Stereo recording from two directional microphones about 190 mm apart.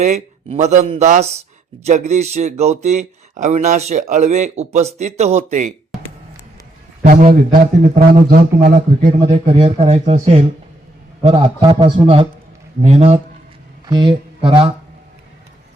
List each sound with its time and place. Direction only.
0.0 s speech: 35° right (ahead or behind)
7.0 s a man's voice: 45° right (ahead or behind); by 14.7 s 25° right (ahead or behind)